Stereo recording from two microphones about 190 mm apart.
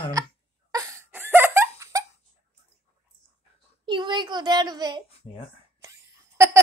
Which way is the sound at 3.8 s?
25° right (ahead or behind).